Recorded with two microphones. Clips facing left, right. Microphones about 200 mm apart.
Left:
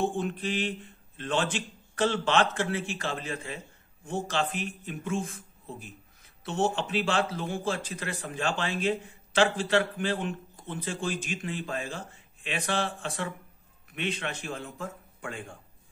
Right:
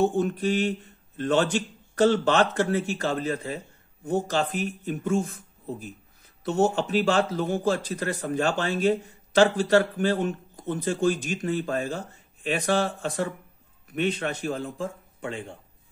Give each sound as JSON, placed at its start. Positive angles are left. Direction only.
{"t": 0.0, "sound": "speech", "side_deg": -40}